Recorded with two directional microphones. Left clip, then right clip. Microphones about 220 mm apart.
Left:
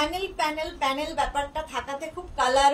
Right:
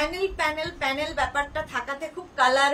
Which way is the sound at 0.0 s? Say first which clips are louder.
Right 1 dB; 10° right (ahead or behind).